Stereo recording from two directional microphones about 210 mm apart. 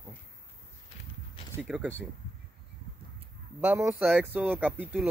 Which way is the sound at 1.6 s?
5° right (ahead or behind).